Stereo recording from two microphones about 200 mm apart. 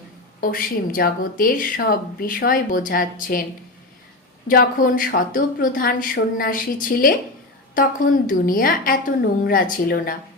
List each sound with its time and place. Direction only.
0.4 s speech: 45° left (ahead or behind)
4.4 s speech: 45° left (ahead or behind)